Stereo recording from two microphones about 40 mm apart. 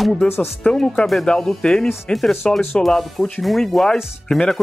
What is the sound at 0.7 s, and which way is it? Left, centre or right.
Speech, centre.